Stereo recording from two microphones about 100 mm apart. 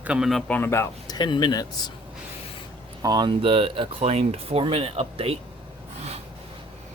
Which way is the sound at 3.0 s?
45° right (ahead or behind).